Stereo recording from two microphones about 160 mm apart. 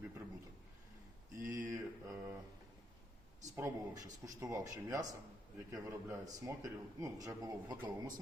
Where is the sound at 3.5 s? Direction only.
20° right (ahead or behind).